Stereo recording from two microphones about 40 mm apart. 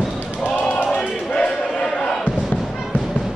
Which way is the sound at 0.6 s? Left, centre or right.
Left.